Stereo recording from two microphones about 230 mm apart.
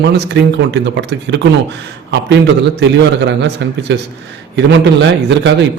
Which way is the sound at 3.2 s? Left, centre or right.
Right.